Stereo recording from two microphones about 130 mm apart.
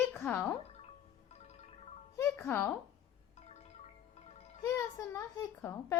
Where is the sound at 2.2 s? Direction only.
15° left (ahead or behind).